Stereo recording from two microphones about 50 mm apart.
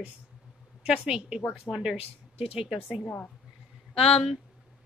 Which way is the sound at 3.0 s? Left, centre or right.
Left.